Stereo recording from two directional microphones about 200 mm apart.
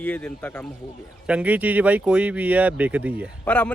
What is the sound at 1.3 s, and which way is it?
A man's voice, 5° right (ahead or behind).